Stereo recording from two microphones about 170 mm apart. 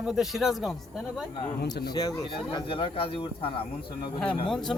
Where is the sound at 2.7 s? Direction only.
30° left (ahead or behind).